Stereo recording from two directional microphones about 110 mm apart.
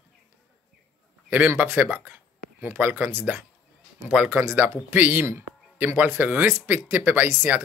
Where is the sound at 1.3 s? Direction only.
15° right (ahead or behind).